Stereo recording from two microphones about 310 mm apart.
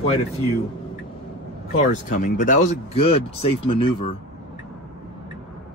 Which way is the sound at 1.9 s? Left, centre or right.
Left.